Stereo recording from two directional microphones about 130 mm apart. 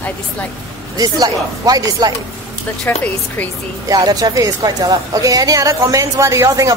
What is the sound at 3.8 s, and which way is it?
A woman's voice, 30° right (ahead or behind).